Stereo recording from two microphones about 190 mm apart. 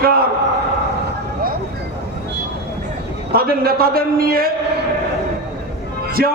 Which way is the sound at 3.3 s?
50° right (ahead or behind).